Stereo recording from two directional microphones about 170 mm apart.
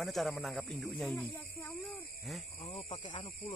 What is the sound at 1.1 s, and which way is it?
Snake, 10° left (ahead or behind).